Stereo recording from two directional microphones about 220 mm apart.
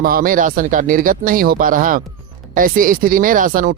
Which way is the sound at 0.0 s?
40° right (ahead or behind).